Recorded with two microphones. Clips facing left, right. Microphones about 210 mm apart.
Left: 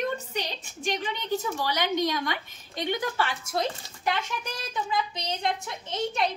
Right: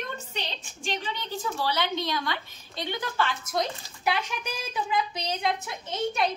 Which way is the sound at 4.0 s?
10° right (ahead or behind).